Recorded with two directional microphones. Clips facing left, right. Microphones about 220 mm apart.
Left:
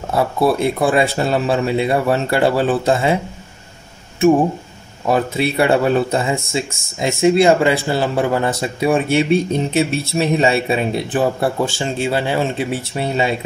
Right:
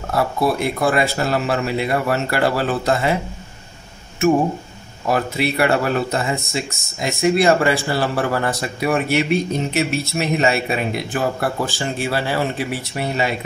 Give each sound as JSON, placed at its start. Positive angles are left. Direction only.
{"t": 0.1, "sound": "speech", "side_deg": 25}
{"t": 5.0, "sound": "speech", "side_deg": 25}